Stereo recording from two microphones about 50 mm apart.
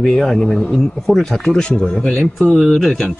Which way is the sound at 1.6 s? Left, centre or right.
Centre.